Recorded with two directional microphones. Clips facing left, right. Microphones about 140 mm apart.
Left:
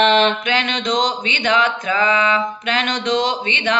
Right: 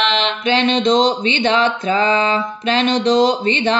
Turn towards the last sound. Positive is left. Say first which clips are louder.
# right 4 dB
turn(degrees=-35)  # may be behind; listen again after turning